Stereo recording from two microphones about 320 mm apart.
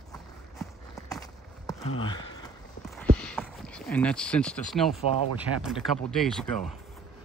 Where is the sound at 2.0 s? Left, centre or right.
Centre.